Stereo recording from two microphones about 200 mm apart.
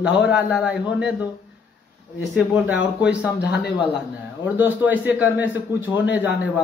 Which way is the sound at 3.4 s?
55° left (ahead or behind).